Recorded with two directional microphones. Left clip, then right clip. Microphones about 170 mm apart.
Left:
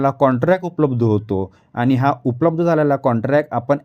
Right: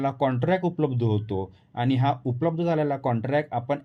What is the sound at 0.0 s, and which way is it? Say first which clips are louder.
Speech: left 9 dB; 55° left (ahead or behind).